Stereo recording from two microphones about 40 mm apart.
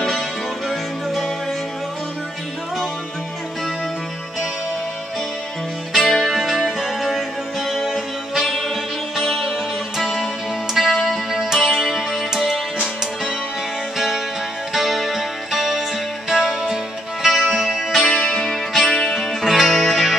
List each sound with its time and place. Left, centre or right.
0.7 s music: centre
5.9 s music: centre
9.1 s music: centre
13.9 s music: centre
18.0 s music: left
18.4 s music: centre
19.1 s music: centre